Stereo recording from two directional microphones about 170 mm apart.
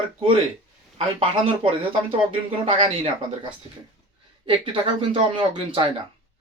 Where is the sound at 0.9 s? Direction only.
30° right (ahead or behind).